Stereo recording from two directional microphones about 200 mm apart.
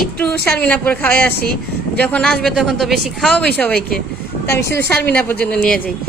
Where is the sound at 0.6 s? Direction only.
5° left (ahead or behind).